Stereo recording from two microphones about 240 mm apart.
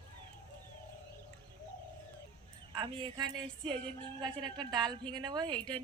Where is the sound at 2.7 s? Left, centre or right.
Right.